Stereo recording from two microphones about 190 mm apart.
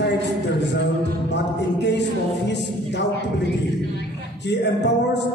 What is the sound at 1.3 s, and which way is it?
Music, 65° left (ahead or behind).